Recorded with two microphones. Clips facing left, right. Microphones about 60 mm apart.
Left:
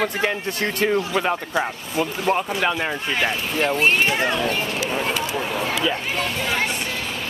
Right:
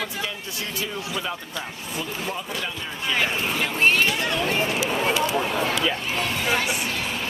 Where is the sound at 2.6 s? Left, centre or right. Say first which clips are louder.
Left 10 dB; left.